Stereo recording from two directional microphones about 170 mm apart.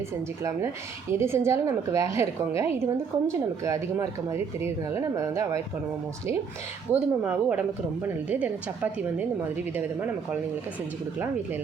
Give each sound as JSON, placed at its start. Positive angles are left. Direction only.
{"t": 1.2, "sound": "a woman's voice", "side_deg": -15}
{"t": 6.9, "sound": "a woman's voice", "side_deg": -10}